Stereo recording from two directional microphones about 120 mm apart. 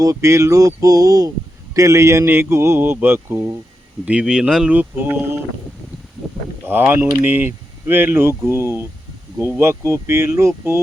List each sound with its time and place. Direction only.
0.0 s a man's voice: 25° right (ahead or behind)
4.0 s speech: 10° right (ahead or behind)
6.7 s a man's voice: 15° right (ahead or behind)